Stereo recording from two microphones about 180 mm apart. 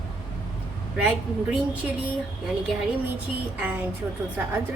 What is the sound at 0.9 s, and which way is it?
Speech, 5° right (ahead or behind).